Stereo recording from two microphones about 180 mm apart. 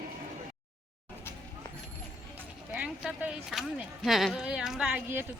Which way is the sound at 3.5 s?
Centre (ahead or behind).